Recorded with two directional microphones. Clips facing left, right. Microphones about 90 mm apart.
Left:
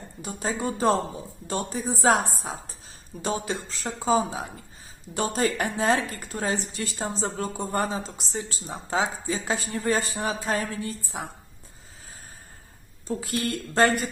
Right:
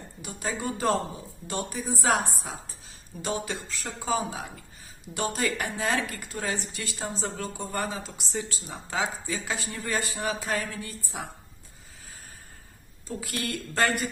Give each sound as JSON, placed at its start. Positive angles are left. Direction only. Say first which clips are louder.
{"t": 0.2, "sound": "a woman's voice", "louder": "left 3 dB", "side_deg": 35}
{"t": 13.1, "sound": "a woman's voice", "louder": "left 5 dB", "side_deg": 30}